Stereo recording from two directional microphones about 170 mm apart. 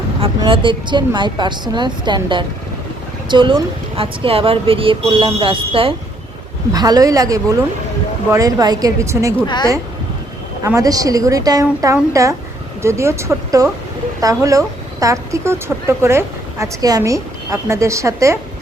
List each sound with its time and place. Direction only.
0.2 s speech: 30° right (ahead or behind)
10.8 s speech: 20° right (ahead or behind)